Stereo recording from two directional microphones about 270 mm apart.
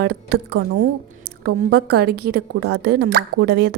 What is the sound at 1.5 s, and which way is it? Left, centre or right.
A woman's voice, right.